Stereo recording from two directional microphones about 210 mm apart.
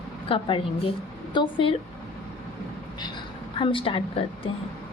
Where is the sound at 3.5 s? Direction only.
25° left (ahead or behind).